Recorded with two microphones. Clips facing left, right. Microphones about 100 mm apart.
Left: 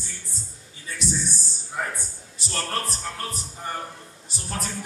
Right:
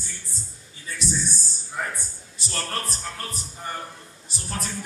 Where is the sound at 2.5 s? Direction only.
35° left (ahead or behind).